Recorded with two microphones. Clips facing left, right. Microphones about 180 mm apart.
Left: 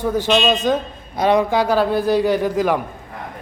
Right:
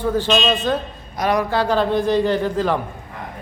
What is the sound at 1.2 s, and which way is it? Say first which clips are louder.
Speech: left 4 dB; 25° left (ahead or behind).